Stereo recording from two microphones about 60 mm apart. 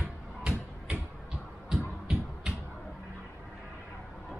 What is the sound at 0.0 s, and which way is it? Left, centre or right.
Music, centre.